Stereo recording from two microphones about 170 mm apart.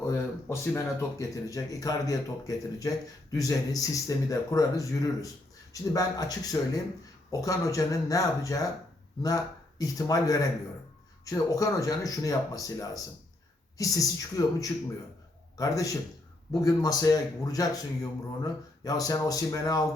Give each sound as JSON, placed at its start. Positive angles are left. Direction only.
{"t": 0.0, "sound": "speech", "side_deg": 15}